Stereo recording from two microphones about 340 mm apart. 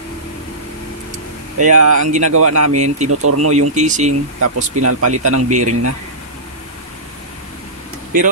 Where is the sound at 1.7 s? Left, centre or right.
Right.